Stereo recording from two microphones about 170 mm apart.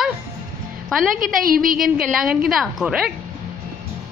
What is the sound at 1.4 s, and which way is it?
Speech, 55° right (ahead or behind).